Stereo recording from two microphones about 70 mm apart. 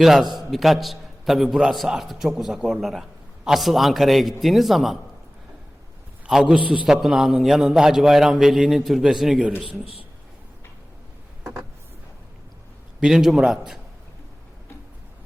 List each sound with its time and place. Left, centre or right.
0.0 s a man's voice: centre
6.2 s a man's voice: centre
13.0 s a man's voice: centre